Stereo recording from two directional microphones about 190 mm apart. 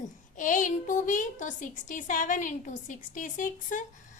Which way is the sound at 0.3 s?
45° left (ahead or behind).